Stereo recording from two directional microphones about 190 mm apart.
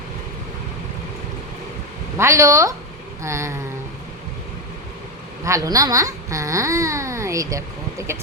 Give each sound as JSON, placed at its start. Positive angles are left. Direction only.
{"t": 2.1, "sound": "a woman's voice", "side_deg": -15}
{"t": 5.5, "sound": "speech", "side_deg": -15}